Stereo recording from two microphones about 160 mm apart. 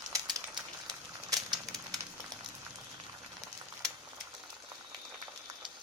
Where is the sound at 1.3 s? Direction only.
25° right (ahead or behind).